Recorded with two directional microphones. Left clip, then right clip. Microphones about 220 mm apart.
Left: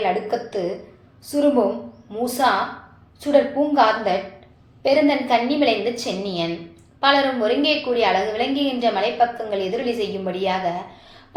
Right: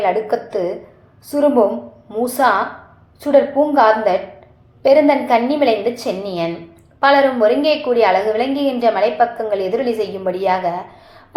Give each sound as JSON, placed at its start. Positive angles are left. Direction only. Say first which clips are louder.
{"t": 0.0, "sound": "a woman's voice", "louder": "right 5 dB", "side_deg": -25}